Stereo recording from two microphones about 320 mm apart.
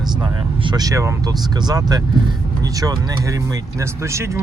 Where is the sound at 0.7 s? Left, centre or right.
Centre.